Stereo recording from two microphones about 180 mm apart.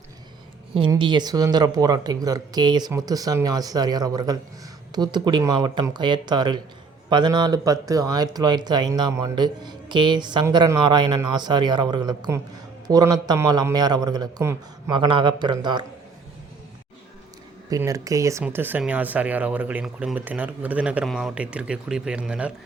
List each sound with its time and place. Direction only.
0.9 s speech: 25° right (ahead or behind)
17.7 s speech: 20° right (ahead or behind)